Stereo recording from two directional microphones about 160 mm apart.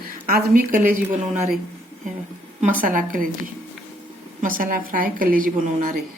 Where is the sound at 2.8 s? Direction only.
60° right (ahead or behind).